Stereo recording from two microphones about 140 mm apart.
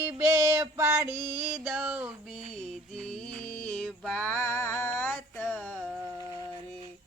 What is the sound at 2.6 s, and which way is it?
Mantra, 5° left (ahead or behind).